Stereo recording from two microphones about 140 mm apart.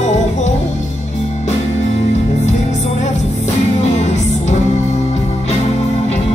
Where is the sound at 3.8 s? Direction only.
55° left (ahead or behind).